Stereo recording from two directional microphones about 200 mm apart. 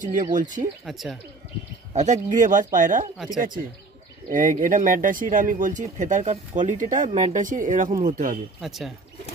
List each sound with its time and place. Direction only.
0.0 s speech: 40° right (ahead or behind)
0.8 s speech: centre (ahead or behind)
2.2 s speech: 40° right (ahead or behind)
8.5 s speech: centre (ahead or behind)